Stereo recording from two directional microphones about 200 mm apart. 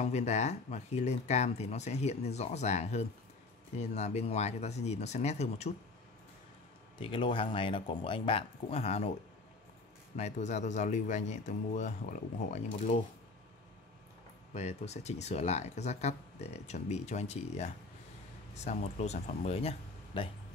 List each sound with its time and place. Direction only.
0.0 s speech: 35° left (ahead or behind)
7.0 s speech: 25° left (ahead or behind)
10.1 s speech: 35° left (ahead or behind)
14.5 s speech: 35° left (ahead or behind)